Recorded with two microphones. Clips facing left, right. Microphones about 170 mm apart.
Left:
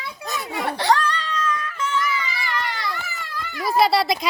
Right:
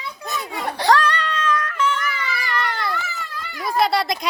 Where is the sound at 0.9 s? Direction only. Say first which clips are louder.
Right 4 dB; 70° right (ahead or behind).